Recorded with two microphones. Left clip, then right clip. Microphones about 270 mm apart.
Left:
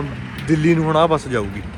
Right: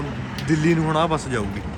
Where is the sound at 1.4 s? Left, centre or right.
Right.